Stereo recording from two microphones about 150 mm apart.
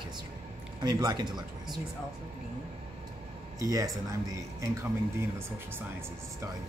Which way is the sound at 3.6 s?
20° right (ahead or behind).